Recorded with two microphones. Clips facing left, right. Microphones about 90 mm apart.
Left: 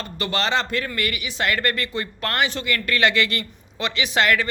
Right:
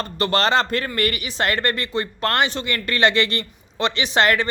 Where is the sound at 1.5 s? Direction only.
25° right (ahead or behind).